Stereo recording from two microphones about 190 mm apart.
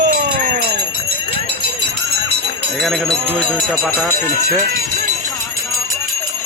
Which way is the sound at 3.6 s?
5° left (ahead or behind).